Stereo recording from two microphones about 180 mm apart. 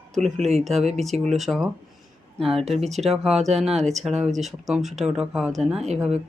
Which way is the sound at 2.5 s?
35° right (ahead or behind).